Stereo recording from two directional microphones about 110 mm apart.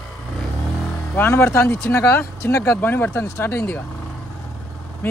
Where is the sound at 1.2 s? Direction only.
20° left (ahead or behind).